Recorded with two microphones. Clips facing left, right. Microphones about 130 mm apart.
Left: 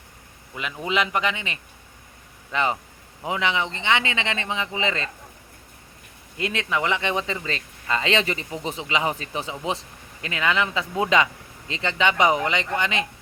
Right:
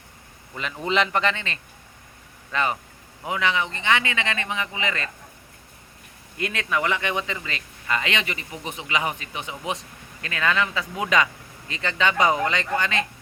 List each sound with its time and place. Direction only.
0.5 s a man's voice: 5° left (ahead or behind); by 5.1 s 25° left (ahead or behind)
6.3 s speech: 25° left (ahead or behind)